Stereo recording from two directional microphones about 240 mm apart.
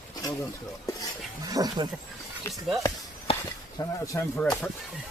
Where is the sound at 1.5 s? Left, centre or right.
Centre.